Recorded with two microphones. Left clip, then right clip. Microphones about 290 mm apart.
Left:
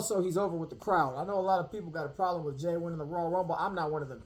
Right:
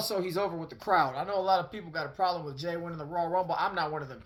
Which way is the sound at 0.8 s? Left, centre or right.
Right.